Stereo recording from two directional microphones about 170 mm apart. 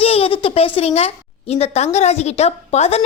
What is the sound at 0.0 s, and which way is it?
A woman's voice, 35° left (ahead or behind).